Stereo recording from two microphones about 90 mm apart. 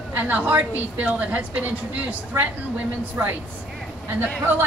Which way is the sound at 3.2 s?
30° right (ahead or behind).